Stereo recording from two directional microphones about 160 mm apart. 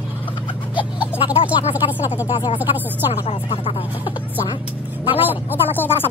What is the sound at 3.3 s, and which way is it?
Speech, 35° left (ahead or behind).